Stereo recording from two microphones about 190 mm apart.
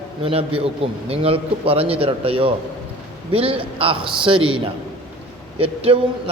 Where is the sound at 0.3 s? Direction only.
30° right (ahead or behind).